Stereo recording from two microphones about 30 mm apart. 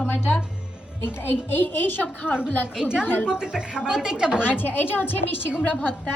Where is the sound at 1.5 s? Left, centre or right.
Left.